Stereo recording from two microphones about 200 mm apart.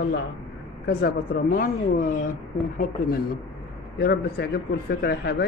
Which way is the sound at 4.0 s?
50° left (ahead or behind).